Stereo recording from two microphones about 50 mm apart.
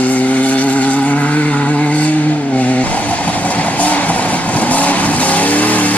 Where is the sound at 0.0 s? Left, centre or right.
Left.